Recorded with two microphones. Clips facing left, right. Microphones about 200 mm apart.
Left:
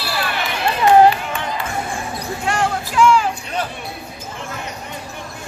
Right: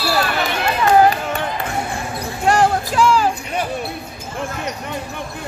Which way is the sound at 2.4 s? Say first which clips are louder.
Right 6 dB; 40° right (ahead or behind).